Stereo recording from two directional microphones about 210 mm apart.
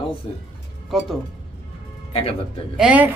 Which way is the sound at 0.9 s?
Centre (ahead or behind).